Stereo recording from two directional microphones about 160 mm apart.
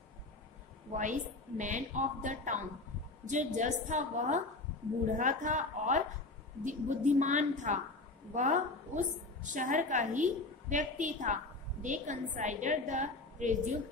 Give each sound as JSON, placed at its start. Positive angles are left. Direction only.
{"t": 0.9, "sound": "a woman's voice", "side_deg": -50}